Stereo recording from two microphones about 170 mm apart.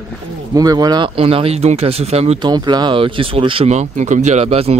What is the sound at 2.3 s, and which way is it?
Speech, 25° right (ahead or behind).